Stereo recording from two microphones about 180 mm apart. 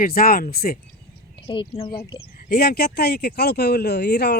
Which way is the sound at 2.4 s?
60° left (ahead or behind).